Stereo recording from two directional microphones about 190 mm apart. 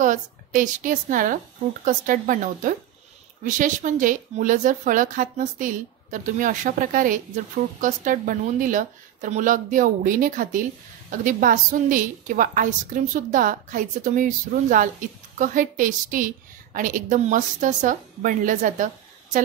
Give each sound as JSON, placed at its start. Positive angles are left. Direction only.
{"t": 0.0, "sound": "a woman's voice", "side_deg": -45}